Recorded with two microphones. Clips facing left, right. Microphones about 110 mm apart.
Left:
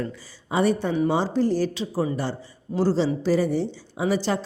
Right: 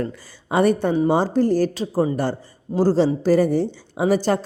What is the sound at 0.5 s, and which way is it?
Speech, 50° right (ahead or behind).